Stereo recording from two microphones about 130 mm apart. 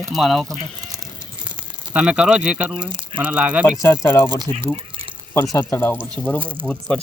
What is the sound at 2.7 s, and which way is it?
Speech, 40° right (ahead or behind).